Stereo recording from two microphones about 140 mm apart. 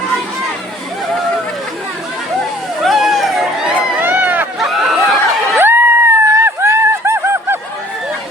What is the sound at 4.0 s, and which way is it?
Run, 15° right (ahead or behind).